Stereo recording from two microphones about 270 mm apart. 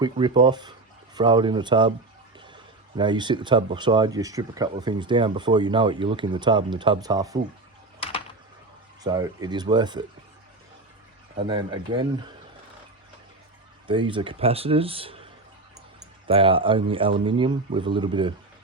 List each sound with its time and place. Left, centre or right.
0.0 s speech: centre
3.0 s speech: centre
9.0 s speech: centre
11.3 s speech: centre
13.8 s speech: centre